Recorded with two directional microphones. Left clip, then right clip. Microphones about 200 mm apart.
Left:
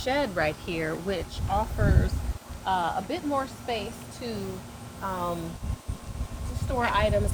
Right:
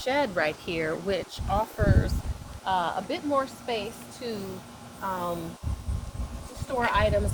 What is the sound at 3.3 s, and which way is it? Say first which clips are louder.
A woman's voice: right 3 dB; 30° right (ahead or behind).